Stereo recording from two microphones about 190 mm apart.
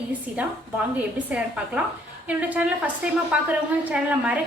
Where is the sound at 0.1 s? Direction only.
10° right (ahead or behind).